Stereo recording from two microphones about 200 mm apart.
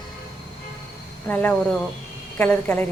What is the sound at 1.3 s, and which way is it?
A woman's voice, 10° left (ahead or behind).